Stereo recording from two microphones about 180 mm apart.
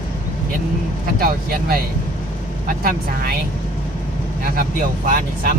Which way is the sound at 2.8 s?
55° right (ahead or behind).